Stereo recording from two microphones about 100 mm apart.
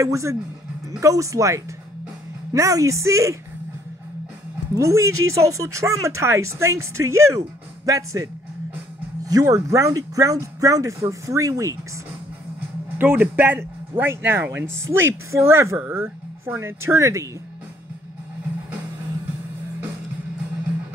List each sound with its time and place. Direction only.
0.0 s speech: 30° right (ahead or behind)
4.7 s speech: 30° right (ahead or behind)
12.9 s speech: 20° right (ahead or behind)